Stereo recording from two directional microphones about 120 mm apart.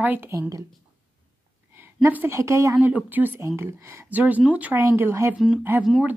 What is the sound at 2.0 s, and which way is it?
Speech, 20° right (ahead or behind).